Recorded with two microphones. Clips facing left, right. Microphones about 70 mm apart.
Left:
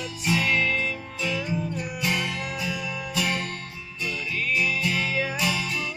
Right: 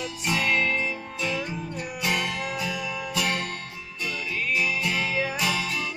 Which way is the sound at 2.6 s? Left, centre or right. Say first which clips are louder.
Even; right.